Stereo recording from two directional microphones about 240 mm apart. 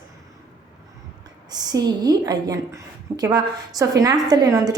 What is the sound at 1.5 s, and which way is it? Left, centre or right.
A woman's voice, centre.